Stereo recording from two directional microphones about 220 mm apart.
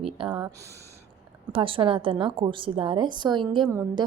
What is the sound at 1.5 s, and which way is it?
A woman's voice, 25° right (ahead or behind).